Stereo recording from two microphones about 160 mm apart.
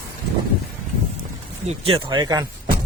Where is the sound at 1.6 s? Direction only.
35° right (ahead or behind).